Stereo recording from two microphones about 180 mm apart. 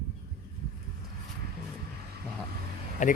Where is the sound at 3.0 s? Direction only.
45° left (ahead or behind).